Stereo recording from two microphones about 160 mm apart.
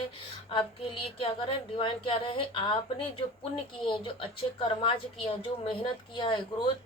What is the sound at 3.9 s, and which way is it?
A woman's voice, 30° left (ahead or behind).